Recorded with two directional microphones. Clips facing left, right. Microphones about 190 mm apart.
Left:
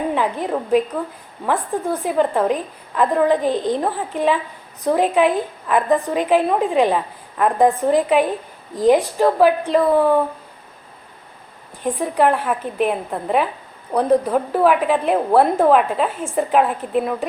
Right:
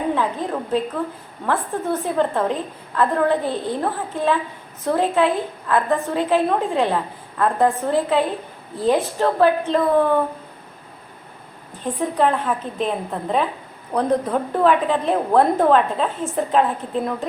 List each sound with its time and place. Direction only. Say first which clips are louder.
0.2 s a woman's voice: left 2 dB; 15° left (ahead or behind)
11.8 s a woman's voice: left 2 dB; 10° left (ahead or behind)